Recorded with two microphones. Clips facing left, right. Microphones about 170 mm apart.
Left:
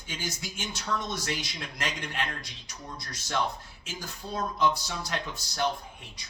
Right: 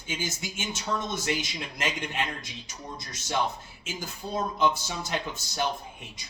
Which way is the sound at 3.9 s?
25° right (ahead or behind).